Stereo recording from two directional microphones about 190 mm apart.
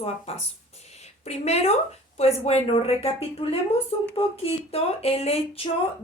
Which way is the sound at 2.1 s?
35° left (ahead or behind).